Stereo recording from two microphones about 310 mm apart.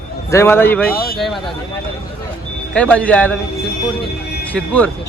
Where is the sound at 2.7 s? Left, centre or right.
Centre.